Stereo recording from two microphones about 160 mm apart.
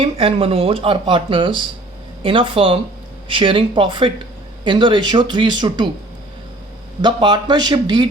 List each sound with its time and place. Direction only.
0.0 s speech: 35° right (ahead or behind)
7.0 s speech: 30° right (ahead or behind)